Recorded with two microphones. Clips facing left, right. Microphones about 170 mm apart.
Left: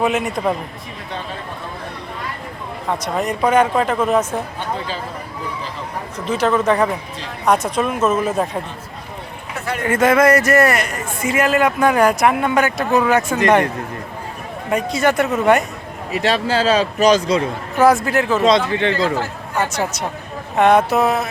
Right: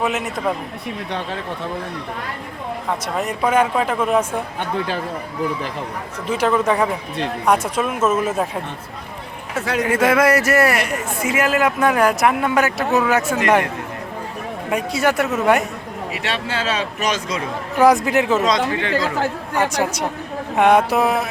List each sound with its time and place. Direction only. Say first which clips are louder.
0.0 s a man's voice: left 3 dB; centre (ahead or behind)
3.2 s speech: left 2 dB; 5° right (ahead or behind)
6.2 s speech: left 1 dB; 10° right (ahead or behind)
9.6 s a man's voice: right 4 dB; 90° right
9.8 s a man's voice: left 3 dB; 10° right (ahead or behind)
14.7 s speech: left 2 dB; 10° right (ahead or behind)
16.1 s a man's voice: left 8 dB; 40° left (ahead or behind)
17.7 s speech: even; 15° right (ahead or behind)
18.4 s speech: left 4 dB; 25° left (ahead or behind)
19.5 s speech: even; 15° right (ahead or behind)